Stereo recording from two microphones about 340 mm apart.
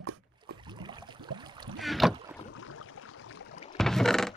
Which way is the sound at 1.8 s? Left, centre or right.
Centre.